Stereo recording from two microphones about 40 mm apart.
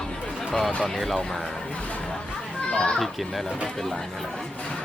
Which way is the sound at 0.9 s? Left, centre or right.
Centre.